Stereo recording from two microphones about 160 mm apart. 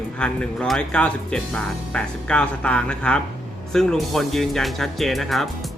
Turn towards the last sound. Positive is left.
turn(degrees=0)  # may be behind; listen again after turning